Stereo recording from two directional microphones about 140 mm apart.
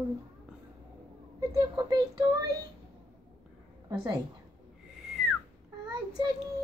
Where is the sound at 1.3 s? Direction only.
30° right (ahead or behind).